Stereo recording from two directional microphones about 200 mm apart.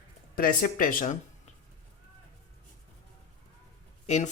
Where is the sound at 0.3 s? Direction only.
45° left (ahead or behind).